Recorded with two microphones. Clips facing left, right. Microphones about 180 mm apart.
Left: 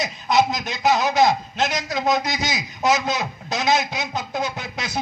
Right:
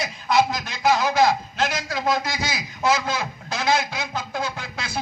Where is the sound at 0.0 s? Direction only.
20° left (ahead or behind).